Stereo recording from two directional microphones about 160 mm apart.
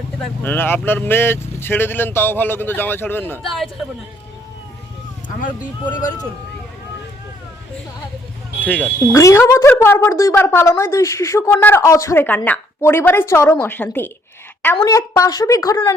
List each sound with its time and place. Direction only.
0.4 s speech: 15° left (ahead or behind)
8.6 s a woman's voice: 10° left (ahead or behind)